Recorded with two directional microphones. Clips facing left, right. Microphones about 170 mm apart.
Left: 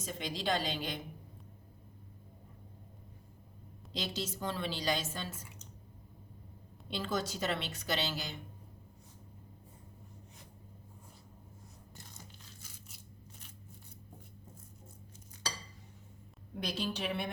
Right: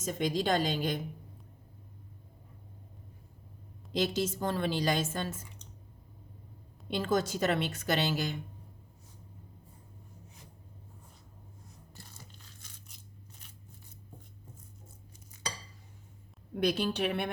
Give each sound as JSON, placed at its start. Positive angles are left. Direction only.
{"t": 0.0, "sound": "a woman's voice", "side_deg": -45}
{"t": 3.9, "sound": "a woman's voice", "side_deg": -50}
{"t": 6.9, "sound": "a woman's voice", "side_deg": -50}
{"t": 16.6, "sound": "a woman's voice", "side_deg": -60}